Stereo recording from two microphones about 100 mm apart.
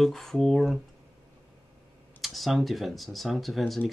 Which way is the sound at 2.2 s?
Centre (ahead or behind).